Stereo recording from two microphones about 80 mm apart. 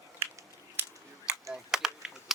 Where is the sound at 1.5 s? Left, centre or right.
Centre.